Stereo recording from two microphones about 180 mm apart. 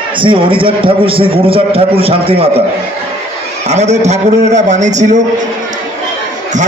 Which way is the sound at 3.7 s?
40° right (ahead or behind).